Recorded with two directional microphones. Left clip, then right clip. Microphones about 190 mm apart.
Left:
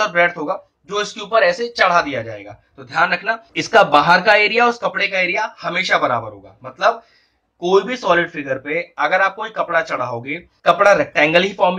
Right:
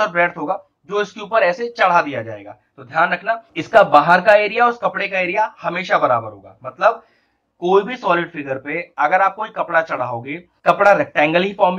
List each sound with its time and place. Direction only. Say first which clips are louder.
0.0 s speech: left 1 dB; 15° left (ahead or behind)
7.6 s speech: even; 15° left (ahead or behind)